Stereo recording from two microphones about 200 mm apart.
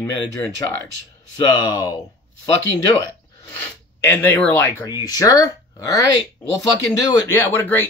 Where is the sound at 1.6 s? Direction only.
15° left (ahead or behind).